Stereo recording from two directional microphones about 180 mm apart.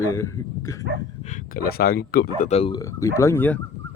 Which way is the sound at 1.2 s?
50° left (ahead or behind).